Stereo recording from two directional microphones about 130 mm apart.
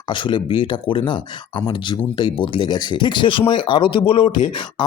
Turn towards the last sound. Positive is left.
turn(degrees=40)  # may be behind; listen again after turning